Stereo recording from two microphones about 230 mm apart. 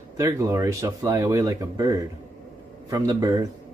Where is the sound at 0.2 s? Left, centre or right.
Centre.